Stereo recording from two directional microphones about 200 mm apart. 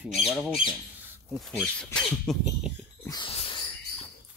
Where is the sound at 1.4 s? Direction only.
Centre (ahead or behind).